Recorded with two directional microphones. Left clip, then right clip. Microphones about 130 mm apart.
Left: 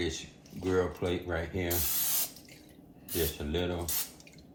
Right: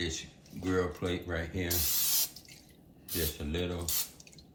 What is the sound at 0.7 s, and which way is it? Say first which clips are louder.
Speech: left 2 dB; 50° left (ahead or behind).